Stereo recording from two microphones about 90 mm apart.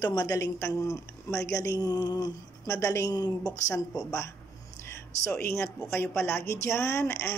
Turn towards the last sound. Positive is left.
turn(degrees=30)  # may be behind; listen again after turning